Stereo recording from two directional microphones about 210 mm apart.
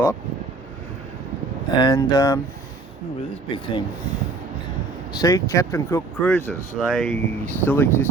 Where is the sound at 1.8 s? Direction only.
20° left (ahead or behind).